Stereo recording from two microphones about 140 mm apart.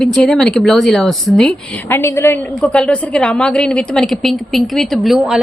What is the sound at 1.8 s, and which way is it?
Speech, 15° left (ahead or behind).